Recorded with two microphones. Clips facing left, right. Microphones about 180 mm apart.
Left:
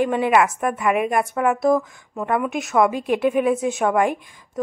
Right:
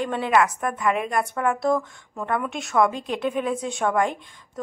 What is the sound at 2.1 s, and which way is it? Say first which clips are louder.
A woman's voice: left 4 dB; 15° left (ahead or behind).